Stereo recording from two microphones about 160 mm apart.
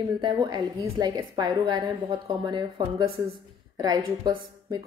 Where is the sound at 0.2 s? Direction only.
30° right (ahead or behind).